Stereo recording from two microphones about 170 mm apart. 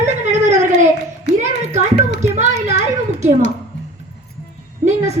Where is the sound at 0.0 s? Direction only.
45° right (ahead or behind).